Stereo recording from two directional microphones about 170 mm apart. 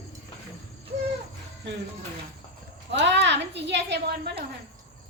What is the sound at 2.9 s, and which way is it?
A woman's voice, 90° right.